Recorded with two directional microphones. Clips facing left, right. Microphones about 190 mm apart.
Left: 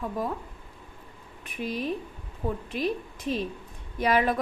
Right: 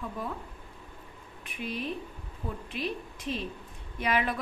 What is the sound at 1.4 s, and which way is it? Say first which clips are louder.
A woman's voice: left 4 dB; 40° left (ahead or behind).